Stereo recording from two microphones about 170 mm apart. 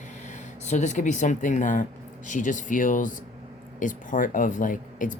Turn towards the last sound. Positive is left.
turn(degrees=50)  # may be behind; listen again after turning